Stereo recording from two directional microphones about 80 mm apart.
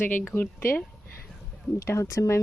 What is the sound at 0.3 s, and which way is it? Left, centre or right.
Speech, left.